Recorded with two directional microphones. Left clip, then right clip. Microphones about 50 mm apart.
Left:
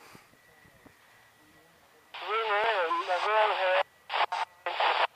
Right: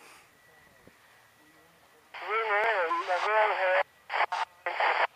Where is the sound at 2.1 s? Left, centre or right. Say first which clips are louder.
Right 1 dB; left.